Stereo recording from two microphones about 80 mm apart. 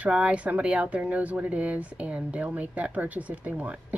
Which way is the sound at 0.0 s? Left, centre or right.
Centre.